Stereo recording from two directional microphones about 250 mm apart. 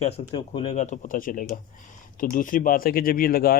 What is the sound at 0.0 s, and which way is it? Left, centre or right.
Speech, left.